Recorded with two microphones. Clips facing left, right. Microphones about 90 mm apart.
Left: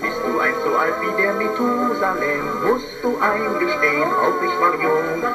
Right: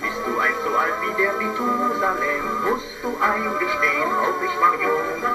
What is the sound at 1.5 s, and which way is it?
Music, centre (ahead or behind).